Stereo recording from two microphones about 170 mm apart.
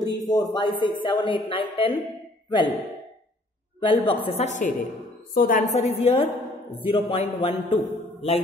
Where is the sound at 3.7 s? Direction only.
30° left (ahead or behind).